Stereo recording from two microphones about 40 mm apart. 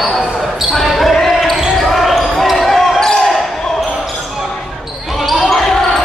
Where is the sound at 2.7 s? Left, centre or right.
Centre.